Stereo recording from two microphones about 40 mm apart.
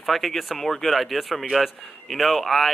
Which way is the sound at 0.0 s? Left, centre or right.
Centre.